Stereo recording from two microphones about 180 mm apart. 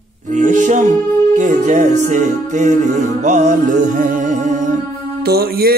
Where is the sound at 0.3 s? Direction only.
45° right (ahead or behind).